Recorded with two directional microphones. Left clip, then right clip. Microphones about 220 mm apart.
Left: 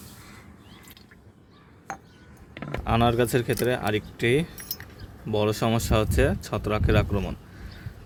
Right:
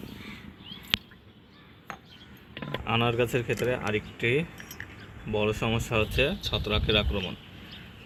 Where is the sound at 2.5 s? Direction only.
15° left (ahead or behind).